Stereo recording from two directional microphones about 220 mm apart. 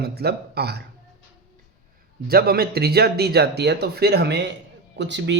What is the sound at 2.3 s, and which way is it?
A man's voice, 45° right (ahead or behind).